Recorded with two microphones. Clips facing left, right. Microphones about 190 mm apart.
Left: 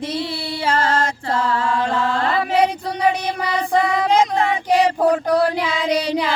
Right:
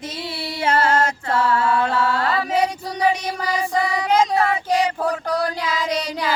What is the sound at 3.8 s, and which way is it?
Music, 60° left (ahead or behind).